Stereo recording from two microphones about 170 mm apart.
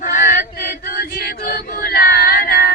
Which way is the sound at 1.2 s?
60° left (ahead or behind).